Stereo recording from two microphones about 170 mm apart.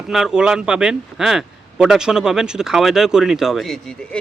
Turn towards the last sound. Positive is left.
turn(degrees=0)  # may be behind; listen again after turning